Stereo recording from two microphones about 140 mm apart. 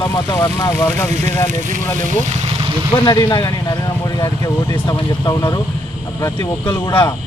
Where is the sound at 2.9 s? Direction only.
35° left (ahead or behind).